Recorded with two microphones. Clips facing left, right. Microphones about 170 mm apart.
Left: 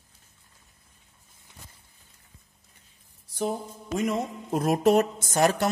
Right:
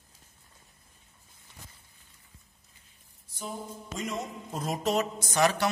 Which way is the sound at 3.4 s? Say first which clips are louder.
Left 8 dB; 60° left (ahead or behind).